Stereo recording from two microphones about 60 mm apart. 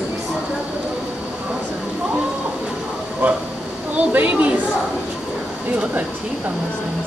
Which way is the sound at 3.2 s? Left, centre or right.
Right.